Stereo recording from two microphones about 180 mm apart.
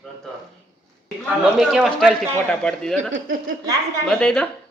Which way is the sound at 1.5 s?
Centre (ahead or behind).